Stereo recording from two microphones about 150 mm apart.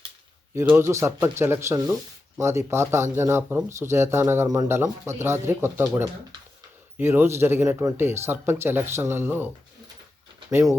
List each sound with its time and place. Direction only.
0.5 s speech: 15° right (ahead or behind)
6.9 s speech: 15° right (ahead or behind)
10.5 s speech: 20° right (ahead or behind)